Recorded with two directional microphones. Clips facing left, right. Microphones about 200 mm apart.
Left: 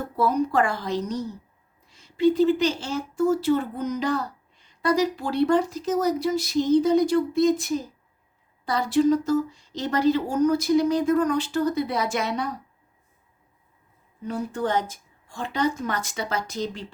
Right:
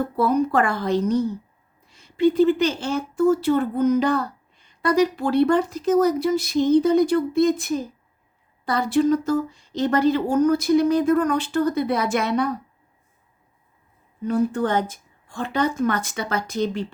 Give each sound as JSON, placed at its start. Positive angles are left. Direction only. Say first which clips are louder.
{"t": 0.2, "sound": "a woman's voice", "louder": "right 2 dB", "side_deg": -55}
{"t": 14.3, "sound": "a woman's voice", "louder": "right 6 dB", "side_deg": -55}